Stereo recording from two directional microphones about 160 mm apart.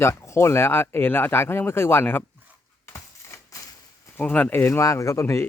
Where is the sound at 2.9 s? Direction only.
15° left (ahead or behind).